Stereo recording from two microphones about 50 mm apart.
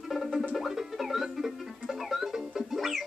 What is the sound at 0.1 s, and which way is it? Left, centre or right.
Music, centre.